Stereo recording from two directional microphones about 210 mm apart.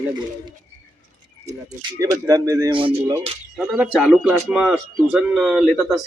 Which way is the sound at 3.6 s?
5° right (ahead or behind).